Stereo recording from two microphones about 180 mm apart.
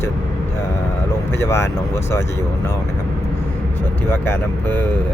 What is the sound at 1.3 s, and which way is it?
Speech, 15° left (ahead or behind).